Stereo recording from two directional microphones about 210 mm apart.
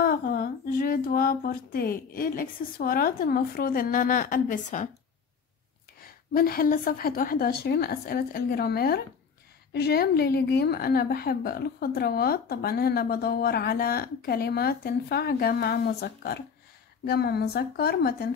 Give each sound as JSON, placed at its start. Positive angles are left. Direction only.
{"t": 0.0, "sound": "a woman's voice", "side_deg": 45}
{"t": 5.9, "sound": "a woman's voice", "side_deg": 45}